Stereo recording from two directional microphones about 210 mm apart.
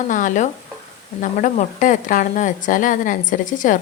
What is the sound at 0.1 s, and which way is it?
A woman's voice, 40° left (ahead or behind).